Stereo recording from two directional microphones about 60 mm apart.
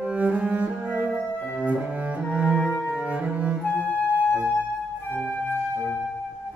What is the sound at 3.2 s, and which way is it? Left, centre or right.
Music, right.